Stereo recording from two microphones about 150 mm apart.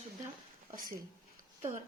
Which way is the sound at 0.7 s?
70° right (ahead or behind).